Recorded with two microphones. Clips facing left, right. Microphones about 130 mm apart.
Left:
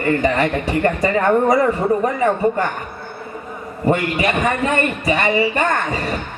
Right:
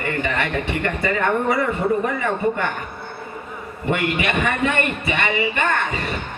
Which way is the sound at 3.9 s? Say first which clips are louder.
Left 2 dB; 35° left (ahead or behind).